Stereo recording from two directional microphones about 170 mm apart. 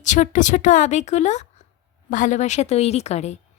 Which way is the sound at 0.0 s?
45° left (ahead or behind).